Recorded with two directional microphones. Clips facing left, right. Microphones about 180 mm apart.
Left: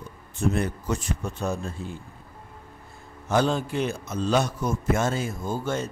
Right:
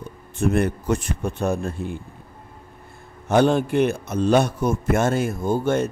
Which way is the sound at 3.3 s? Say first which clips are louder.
Right 6 dB; 60° right (ahead or behind).